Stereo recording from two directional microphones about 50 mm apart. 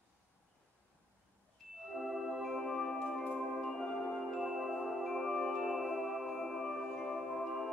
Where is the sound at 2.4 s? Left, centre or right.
Centre.